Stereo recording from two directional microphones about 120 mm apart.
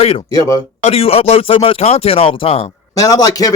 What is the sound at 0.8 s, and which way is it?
Speech, 55° left (ahead or behind).